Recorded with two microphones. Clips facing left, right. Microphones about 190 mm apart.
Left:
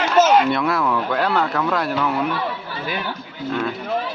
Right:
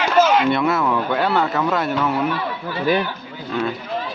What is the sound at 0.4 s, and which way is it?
Speech, centre (ahead or behind).